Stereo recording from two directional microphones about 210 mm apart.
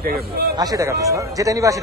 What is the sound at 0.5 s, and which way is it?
Speech, 15° right (ahead or behind).